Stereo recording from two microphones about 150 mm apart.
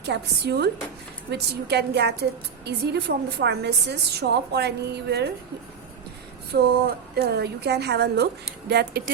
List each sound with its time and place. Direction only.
0.0 s a woman's voice: 90° right
6.5 s a woman's voice: 90° right